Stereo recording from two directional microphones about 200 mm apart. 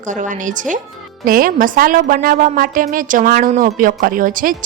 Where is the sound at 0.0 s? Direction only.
40° right (ahead or behind).